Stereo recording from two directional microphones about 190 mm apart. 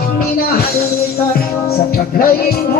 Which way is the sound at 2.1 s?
50° left (ahead or behind).